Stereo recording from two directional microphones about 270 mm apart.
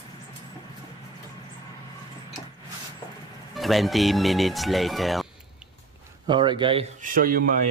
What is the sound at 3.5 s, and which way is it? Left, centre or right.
Speech, centre.